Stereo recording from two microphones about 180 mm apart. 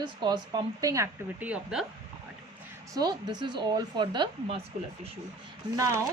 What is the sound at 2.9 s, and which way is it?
A woman's voice, 25° right (ahead or behind).